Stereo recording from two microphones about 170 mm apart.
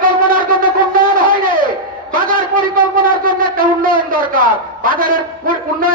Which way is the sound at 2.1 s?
55° right (ahead or behind).